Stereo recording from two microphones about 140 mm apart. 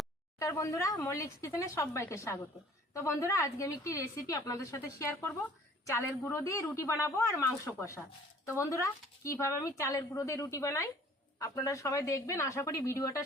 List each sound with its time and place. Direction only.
0.3 s a woman's voice: 20° left (ahead or behind)